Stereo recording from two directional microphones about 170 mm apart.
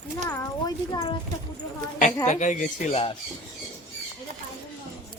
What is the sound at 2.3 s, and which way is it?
Speech, 45° left (ahead or behind).